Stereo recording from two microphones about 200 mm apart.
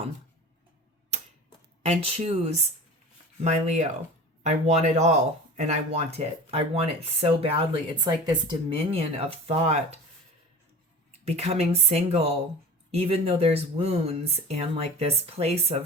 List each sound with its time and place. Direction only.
1.8 s speech: 35° right (ahead or behind)
11.3 s speech: 30° right (ahead or behind)